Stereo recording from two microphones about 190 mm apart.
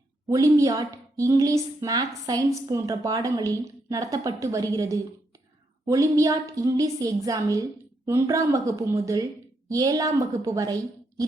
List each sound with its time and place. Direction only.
0.3 s a woman's voice: 15° right (ahead or behind)